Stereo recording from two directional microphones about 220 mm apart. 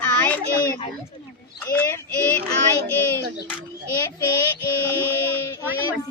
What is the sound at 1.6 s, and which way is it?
Speech, 10° left (ahead or behind).